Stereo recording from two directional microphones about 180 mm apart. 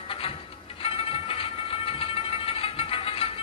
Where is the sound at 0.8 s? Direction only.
30° left (ahead or behind).